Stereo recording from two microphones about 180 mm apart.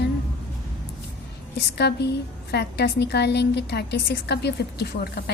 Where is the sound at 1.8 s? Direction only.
65° left (ahead or behind).